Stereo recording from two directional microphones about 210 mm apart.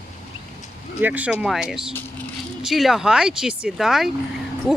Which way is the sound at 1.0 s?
5° right (ahead or behind).